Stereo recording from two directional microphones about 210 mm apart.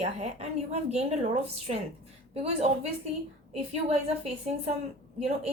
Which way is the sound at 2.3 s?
30° right (ahead or behind).